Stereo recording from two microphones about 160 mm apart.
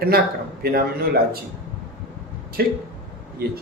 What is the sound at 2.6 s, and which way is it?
Speech, 75° right (ahead or behind).